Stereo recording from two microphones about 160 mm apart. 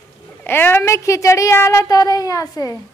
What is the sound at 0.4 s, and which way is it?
A woman's voice, 10° left (ahead or behind).